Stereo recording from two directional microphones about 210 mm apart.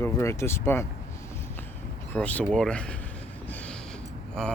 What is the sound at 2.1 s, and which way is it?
Speech, 5° left (ahead or behind).